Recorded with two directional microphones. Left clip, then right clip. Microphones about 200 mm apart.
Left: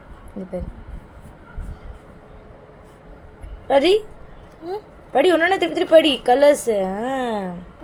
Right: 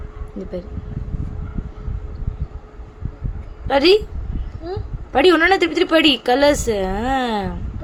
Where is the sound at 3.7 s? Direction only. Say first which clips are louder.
Right 2 dB; 10° right (ahead or behind).